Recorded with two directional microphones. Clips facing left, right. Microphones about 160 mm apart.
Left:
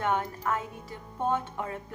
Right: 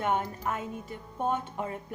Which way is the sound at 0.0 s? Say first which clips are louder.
Even; 20° right (ahead or behind).